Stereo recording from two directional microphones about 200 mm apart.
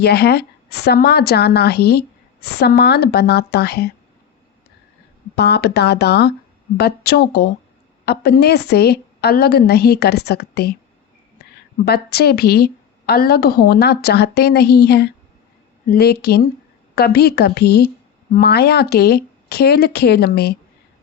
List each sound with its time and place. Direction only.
0.0 s a woman's voice: 55° left (ahead or behind)
5.4 s a woman's voice: 55° left (ahead or behind)
11.9 s a woman's voice: 50° left (ahead or behind)